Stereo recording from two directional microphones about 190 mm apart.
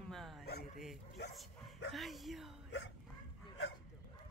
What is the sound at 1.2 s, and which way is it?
Speech, 60° left (ahead or behind).